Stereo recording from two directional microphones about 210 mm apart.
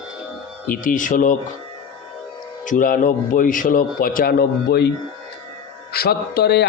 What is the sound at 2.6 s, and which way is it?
A man's voice, 40° left (ahead or behind).